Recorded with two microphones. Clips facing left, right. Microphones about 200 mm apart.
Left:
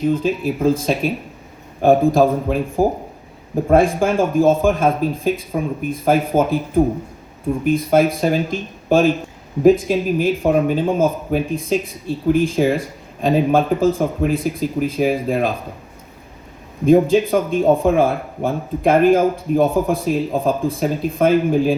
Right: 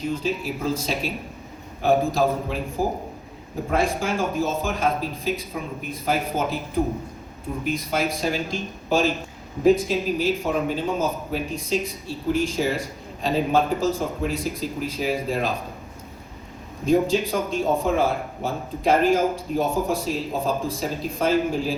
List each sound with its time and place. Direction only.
0.0 s speech: 55° left (ahead or behind)
16.8 s a man's voice: 55° left (ahead or behind)